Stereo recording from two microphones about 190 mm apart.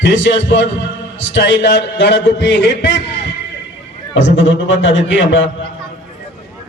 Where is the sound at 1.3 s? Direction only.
70° left (ahead or behind).